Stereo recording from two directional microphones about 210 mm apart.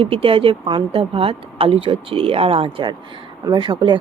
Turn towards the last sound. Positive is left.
turn(degrees=-20)  # may be behind; listen again after turning